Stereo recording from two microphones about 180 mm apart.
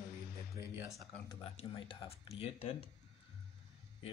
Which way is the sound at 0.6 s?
15° right (ahead or behind).